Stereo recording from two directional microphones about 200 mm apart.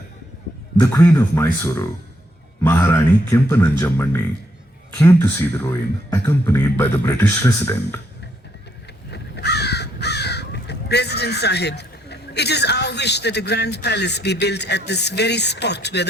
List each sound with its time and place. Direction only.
0.8 s speech: 15° left (ahead or behind)
9.0 s speech: 55° left (ahead or behind)